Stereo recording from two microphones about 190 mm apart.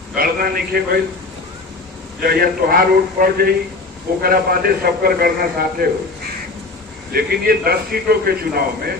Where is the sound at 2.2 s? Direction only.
50° right (ahead or behind).